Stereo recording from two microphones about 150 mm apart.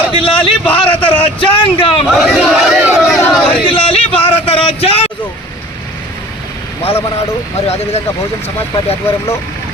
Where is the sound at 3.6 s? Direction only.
35° left (ahead or behind).